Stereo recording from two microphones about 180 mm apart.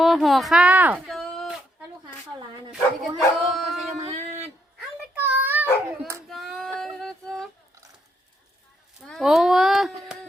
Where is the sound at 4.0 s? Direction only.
40° right (ahead or behind).